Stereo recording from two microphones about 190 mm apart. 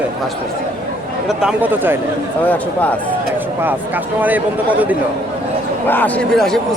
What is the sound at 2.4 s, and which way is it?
Speech, 10° left (ahead or behind).